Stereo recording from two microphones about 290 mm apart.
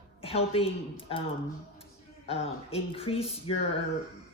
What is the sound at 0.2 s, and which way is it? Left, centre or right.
Speech, centre.